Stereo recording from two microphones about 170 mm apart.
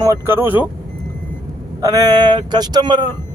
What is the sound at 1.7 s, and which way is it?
Speech, 20° right (ahead or behind).